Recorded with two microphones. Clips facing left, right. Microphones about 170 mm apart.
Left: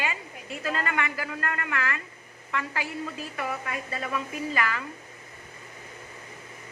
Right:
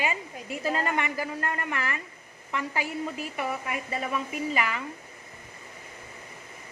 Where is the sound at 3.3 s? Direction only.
15° right (ahead or behind).